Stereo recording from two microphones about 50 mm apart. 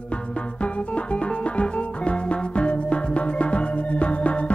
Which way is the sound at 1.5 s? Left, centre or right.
Left.